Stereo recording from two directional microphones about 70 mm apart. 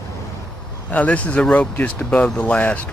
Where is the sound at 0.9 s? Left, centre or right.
Left.